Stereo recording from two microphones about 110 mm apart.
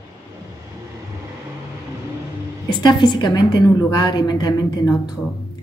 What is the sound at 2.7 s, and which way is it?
A woman's voice, 45° left (ahead or behind).